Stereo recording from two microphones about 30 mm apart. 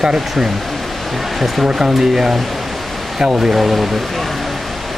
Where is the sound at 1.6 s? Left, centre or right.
Centre.